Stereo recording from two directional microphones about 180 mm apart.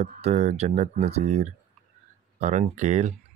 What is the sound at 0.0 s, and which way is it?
Speech, 40° right (ahead or behind).